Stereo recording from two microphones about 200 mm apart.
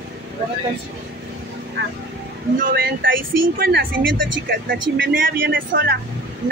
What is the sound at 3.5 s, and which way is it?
Speech, 55° right (ahead or behind).